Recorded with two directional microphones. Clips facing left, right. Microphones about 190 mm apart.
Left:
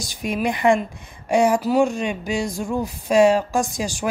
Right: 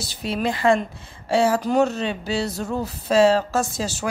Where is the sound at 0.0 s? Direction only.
15° left (ahead or behind).